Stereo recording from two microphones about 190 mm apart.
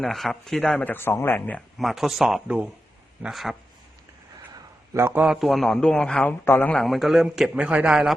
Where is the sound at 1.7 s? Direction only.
Centre (ahead or behind).